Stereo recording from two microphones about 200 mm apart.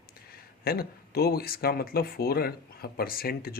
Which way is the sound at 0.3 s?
50° left (ahead or behind).